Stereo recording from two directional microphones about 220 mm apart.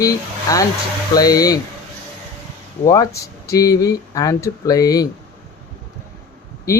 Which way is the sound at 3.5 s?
15° left (ahead or behind).